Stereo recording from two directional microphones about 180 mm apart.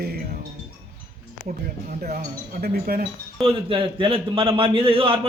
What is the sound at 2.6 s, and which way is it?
Speech, 55° right (ahead or behind).